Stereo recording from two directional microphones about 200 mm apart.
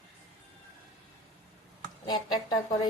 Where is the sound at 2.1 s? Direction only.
20° left (ahead or behind).